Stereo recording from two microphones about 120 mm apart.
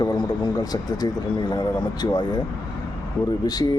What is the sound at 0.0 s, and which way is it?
A man's voice, 40° left (ahead or behind).